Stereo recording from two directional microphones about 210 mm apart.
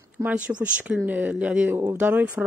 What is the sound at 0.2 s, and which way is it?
Speech, 5° right (ahead or behind).